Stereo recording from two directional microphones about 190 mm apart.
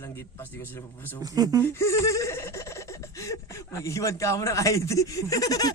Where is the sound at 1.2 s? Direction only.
20° right (ahead or behind).